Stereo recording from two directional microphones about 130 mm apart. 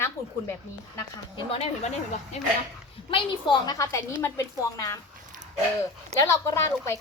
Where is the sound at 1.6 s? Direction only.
55° left (ahead or behind).